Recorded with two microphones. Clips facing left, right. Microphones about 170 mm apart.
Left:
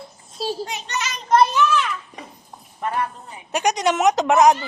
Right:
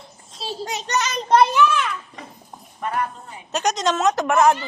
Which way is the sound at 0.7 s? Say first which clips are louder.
Right 4 dB; 40° right (ahead or behind).